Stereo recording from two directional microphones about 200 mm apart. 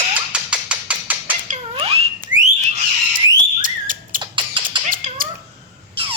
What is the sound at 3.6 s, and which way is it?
Bird, 40° right (ahead or behind).